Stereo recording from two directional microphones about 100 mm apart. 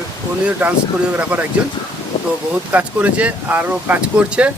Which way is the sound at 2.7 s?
15° right (ahead or behind).